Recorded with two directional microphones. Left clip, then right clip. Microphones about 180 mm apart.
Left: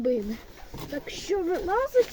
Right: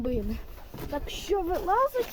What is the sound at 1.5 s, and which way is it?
Speech, 15° right (ahead or behind).